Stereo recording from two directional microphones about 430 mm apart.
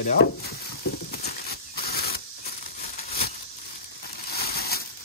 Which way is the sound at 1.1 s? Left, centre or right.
Left.